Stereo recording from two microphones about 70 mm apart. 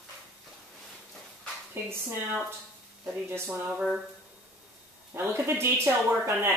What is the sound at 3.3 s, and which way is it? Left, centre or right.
Speech, right.